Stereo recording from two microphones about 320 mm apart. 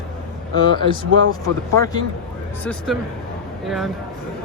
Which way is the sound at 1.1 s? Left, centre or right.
Right.